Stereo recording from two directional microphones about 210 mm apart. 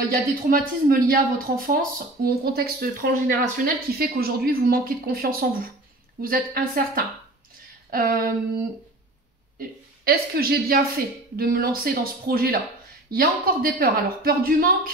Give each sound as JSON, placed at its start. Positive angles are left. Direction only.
{"t": 0.0, "sound": "speech", "side_deg": -40}
{"t": 9.6, "sound": "a woman's voice", "side_deg": -45}